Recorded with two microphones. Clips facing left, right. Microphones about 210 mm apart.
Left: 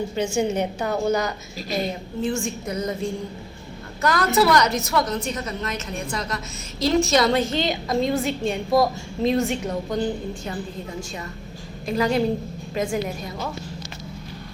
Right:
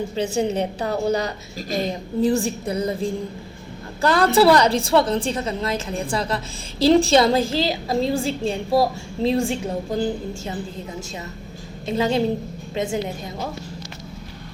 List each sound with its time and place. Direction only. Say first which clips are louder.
0.2 s a woman's voice: right 1 dB; 35° right (ahead or behind)
4.0 s a woman's voice: right 4 dB; 30° right (ahead or behind)
11.9 s a woman's voice: right 1 dB; 25° right (ahead or behind)